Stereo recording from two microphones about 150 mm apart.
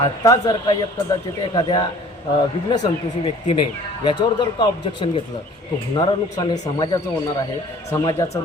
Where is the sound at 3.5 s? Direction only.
35° left (ahead or behind).